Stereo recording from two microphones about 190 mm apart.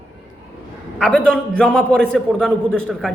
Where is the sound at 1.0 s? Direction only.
5° left (ahead or behind).